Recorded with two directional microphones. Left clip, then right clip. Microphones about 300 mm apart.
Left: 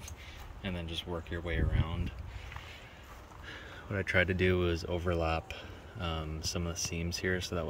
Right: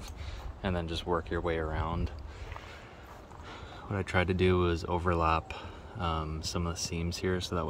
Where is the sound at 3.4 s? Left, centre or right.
Centre.